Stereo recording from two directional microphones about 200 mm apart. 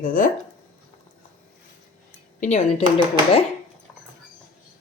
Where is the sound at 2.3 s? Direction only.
35° left (ahead or behind).